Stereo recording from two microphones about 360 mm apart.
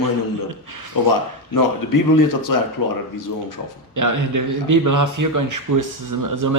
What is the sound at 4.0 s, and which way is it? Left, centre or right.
Speech, right.